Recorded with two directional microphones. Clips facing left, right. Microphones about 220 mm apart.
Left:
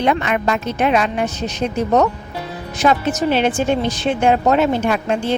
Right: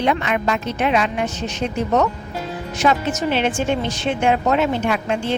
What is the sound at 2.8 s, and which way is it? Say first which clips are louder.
Speech: left 3 dB; 40° left (ahead or behind).